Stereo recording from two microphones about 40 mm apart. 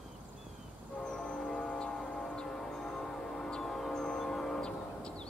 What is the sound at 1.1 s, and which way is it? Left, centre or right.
Train, left.